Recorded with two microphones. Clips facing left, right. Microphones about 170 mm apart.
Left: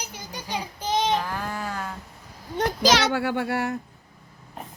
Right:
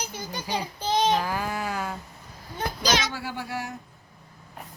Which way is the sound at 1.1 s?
5° right (ahead or behind).